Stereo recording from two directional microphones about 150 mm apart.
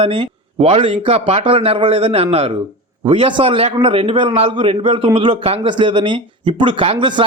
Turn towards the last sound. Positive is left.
turn(degrees=-30)  # may be behind; listen again after turning